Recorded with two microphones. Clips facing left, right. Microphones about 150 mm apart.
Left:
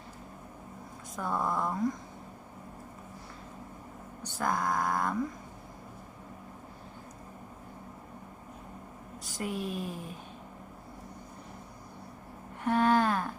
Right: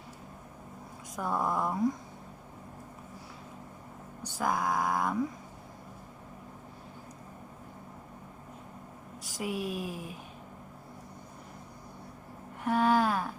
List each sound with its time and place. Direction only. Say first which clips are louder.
1.1 s speech: right 1 dB; 10° right (ahead or behind)
4.4 s speech: even; 5° right (ahead or behind)
9.2 s speech: right 1 dB; 5° right (ahead or behind)
12.6 s a sound: even; 5° right (ahead or behind)